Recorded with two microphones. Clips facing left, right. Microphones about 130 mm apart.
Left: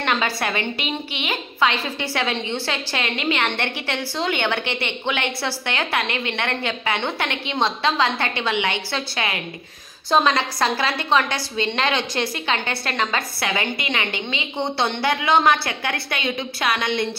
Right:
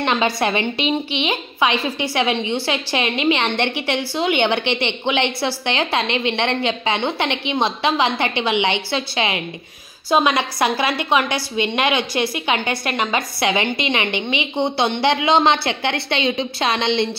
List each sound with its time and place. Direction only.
0.0 s a woman's voice: 20° right (ahead or behind)